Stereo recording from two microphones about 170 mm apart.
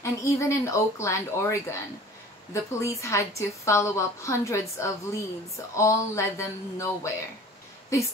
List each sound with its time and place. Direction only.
0.0 s a woman's voice: 15° left (ahead or behind)